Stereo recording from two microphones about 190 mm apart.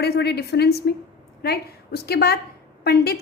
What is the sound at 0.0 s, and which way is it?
A woman's voice, 60° left (ahead or behind).